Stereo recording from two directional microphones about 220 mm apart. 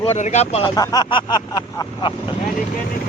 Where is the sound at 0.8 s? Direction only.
20° left (ahead or behind).